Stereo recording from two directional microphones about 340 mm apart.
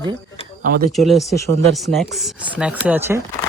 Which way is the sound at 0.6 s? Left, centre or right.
Right.